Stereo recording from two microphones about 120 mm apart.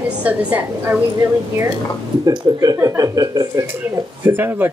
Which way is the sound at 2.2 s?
40° right (ahead or behind).